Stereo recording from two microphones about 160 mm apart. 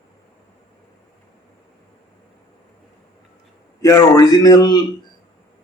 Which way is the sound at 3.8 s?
20° left (ahead or behind).